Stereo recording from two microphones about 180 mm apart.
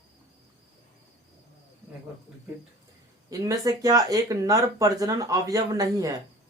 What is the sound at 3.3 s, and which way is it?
A man's voice, 20° right (ahead or behind).